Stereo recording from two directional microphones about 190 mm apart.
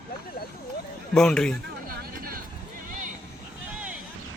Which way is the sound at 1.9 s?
50° right (ahead or behind).